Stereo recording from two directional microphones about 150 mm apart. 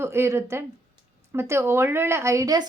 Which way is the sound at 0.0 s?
15° right (ahead or behind).